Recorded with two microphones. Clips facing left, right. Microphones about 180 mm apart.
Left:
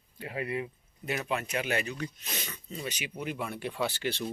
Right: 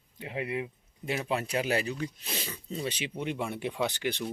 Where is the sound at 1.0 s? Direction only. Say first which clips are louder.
Right 1 dB; 25° right (ahead or behind).